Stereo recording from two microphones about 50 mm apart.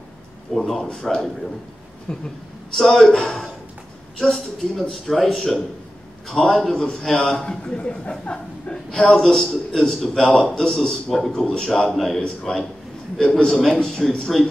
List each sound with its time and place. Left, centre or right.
0.7 s a man's voice: centre
14.3 s speech: centre